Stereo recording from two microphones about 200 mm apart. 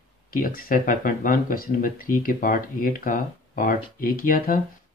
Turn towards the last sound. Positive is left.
turn(degrees=45)  # may be behind; listen again after turning